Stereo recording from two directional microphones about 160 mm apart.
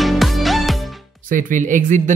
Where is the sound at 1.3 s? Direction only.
55° right (ahead or behind).